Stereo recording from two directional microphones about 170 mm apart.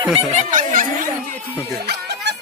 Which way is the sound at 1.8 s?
80° right.